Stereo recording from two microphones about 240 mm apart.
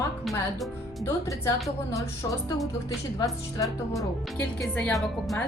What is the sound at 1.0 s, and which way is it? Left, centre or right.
A woman's voice, centre.